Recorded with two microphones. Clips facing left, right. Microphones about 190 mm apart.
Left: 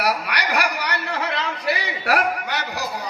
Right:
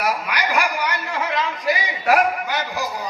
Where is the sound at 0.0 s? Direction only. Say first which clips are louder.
Even; 70° left (ahead or behind).